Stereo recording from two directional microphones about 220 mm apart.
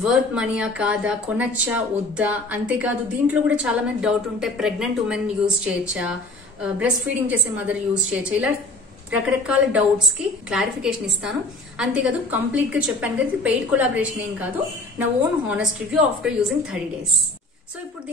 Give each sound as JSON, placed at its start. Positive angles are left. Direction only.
{"t": 0.0, "sound": "a woman's voice", "side_deg": -5}